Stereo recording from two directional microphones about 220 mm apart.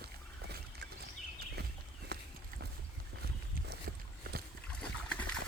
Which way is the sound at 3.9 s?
40° right (ahead or behind).